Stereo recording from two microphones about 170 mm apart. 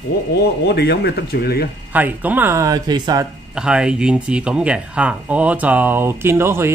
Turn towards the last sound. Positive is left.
turn(degrees=-15)  # may be behind; listen again after turning